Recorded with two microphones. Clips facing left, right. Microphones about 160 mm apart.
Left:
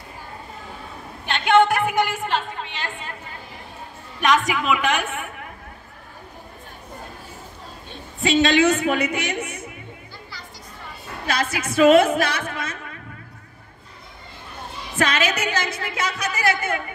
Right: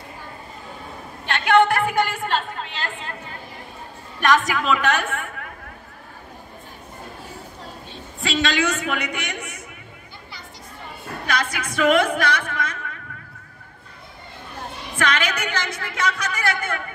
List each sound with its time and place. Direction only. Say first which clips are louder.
1.2 s a woman's voice: even; 20° left (ahead or behind)
4.2 s a woman's voice: even; 10° left (ahead or behind)
8.2 s a woman's voice: left 5 dB; 25° left (ahead or behind)
11.2 s a woman's voice: left 1 dB; 25° left (ahead or behind)
15.0 s a woman's voice: left 2 dB; 25° left (ahead or behind)